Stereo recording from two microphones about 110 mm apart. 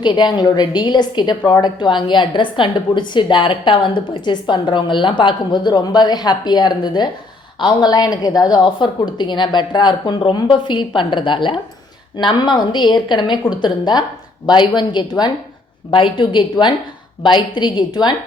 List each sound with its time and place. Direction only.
0.0 s a woman's voice: 45° left (ahead or behind)